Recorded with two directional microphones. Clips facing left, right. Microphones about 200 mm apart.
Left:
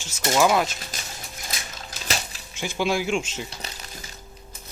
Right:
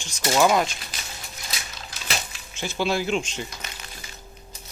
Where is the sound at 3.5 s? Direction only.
35° left (ahead or behind).